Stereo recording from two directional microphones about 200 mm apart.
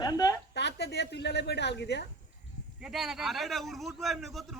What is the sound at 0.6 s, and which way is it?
A woman's voice, 60° left (ahead or behind).